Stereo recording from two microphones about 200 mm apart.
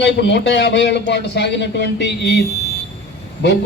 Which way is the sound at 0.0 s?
60° left (ahead or behind).